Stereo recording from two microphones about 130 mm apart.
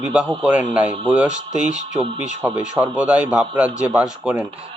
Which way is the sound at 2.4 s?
10° right (ahead or behind).